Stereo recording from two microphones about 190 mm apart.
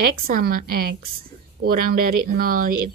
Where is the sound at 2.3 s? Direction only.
50° right (ahead or behind).